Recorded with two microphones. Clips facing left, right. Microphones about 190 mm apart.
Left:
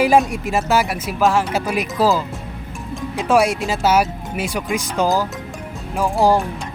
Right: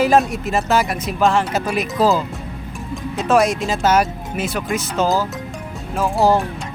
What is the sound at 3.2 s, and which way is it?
Speech, 10° left (ahead or behind).